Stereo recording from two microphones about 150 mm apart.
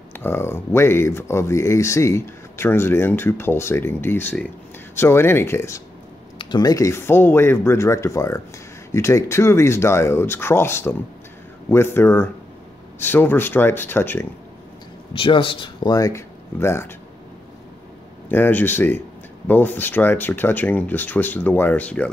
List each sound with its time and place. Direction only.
0.2 s speech: 15° left (ahead or behind)
6.3 s speech: 30° left (ahead or behind)
15.1 s speech: 35° left (ahead or behind); by 16.9 s 15° left (ahead or behind)
18.3 s speech: 15° left (ahead or behind)